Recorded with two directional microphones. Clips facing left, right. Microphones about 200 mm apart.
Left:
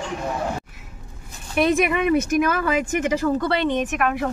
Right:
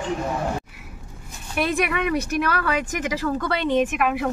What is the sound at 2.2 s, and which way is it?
Speech, 50° left (ahead or behind).